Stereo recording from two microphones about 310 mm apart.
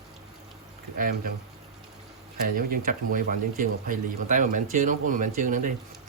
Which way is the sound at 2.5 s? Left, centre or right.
Right.